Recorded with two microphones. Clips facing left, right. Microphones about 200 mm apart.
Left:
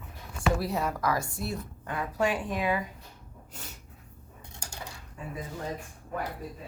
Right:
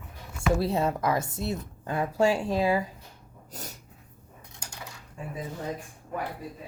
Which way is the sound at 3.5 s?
40° right (ahead or behind).